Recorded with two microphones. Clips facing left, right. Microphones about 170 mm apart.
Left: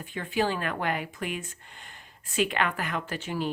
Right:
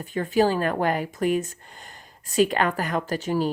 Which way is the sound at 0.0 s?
40° right (ahead or behind).